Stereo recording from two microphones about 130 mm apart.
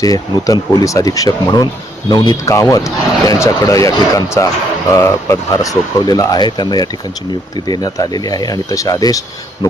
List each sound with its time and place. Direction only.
0.0 s a man's voice: 30° left (ahead or behind)